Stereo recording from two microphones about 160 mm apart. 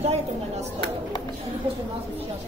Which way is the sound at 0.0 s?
45° right (ahead or behind).